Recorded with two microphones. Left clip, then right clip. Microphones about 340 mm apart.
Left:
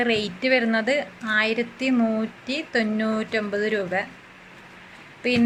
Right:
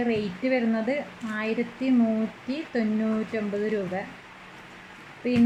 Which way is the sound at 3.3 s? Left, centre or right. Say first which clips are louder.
Left 5 dB; left.